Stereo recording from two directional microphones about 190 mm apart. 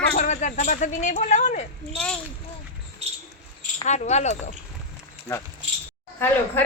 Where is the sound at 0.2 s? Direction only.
40° left (ahead or behind).